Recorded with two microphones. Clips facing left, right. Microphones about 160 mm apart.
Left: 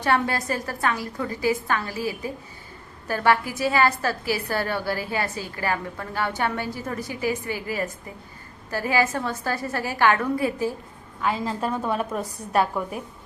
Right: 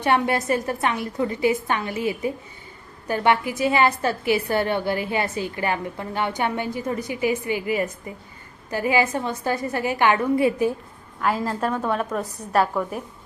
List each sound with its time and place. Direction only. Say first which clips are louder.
0.0 s a woman's voice: right 2 dB; 20° right (ahead or behind)
11.2 s a woman's voice: right 2 dB; 5° right (ahead or behind)